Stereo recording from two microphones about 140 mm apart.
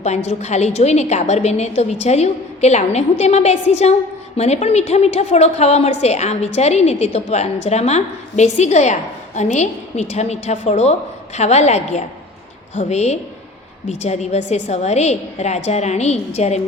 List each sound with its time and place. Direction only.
0.0 s a woman's voice: 55° left (ahead or behind)